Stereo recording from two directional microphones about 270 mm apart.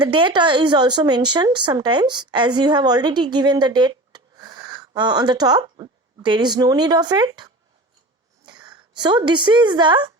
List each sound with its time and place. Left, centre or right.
0.0 s a woman's voice: centre